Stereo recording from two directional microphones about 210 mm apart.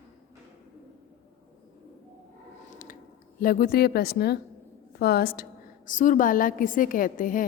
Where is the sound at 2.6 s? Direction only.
40° left (ahead or behind).